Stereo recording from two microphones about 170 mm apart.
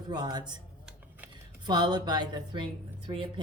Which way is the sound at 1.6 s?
25° right (ahead or behind).